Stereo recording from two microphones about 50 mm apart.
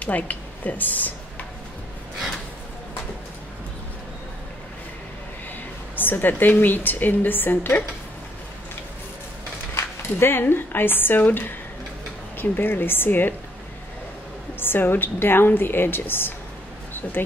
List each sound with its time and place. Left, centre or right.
0.0 s a woman's voice: left
5.9 s a woman's voice: left
9.8 s speech: left
12.4 s a woman's voice: left
14.6 s a woman's voice: left